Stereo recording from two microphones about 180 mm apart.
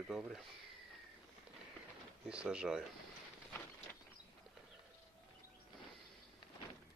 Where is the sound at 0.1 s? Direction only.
Centre (ahead or behind).